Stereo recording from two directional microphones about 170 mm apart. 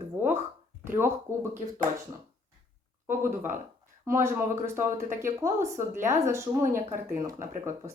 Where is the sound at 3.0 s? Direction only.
15° right (ahead or behind).